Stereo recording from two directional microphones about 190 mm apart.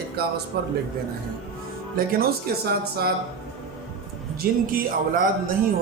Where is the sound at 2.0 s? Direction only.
55° right (ahead or behind).